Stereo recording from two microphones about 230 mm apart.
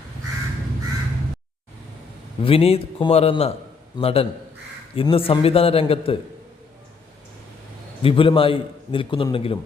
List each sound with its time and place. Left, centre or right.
2.4 s a man's voice: left
8.0 s a man's voice: left